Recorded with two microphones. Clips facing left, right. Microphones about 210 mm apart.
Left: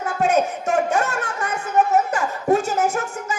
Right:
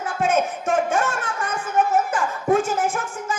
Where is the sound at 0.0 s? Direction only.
40° left (ahead or behind).